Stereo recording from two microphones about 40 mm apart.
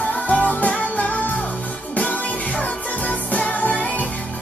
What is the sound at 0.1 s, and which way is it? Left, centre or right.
Music, left.